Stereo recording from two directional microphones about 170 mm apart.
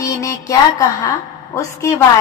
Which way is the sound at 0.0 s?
20° left (ahead or behind).